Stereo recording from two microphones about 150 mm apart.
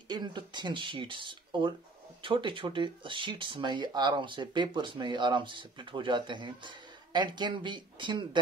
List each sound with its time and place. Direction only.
0.1 s speech: 30° right (ahead or behind)